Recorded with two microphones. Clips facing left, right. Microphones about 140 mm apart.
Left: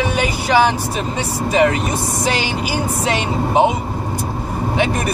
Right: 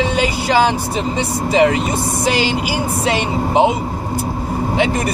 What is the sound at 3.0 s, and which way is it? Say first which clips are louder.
Speech: right 2 dB; 15° right (ahead or behind).